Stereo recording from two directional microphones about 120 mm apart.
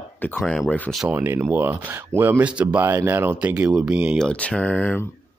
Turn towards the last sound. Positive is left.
turn(degrees=10)  # may be behind; listen again after turning